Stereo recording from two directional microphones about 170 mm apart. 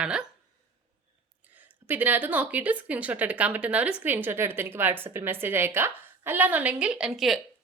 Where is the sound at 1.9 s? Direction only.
10° right (ahead or behind).